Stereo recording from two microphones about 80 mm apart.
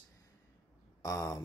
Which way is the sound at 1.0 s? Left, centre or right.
Left.